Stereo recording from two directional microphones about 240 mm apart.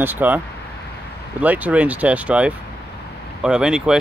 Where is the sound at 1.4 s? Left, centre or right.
Centre.